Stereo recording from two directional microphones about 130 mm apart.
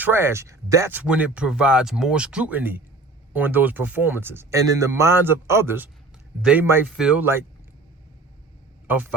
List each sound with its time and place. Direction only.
0.0 s a man's voice: 20° right (ahead or behind)
8.9 s speech: 15° right (ahead or behind)